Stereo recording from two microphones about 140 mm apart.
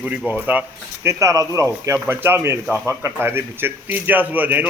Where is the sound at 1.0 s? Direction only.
20° right (ahead or behind).